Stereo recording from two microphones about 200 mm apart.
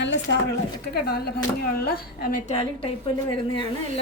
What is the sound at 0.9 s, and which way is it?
A woman's voice, 50° left (ahead or behind).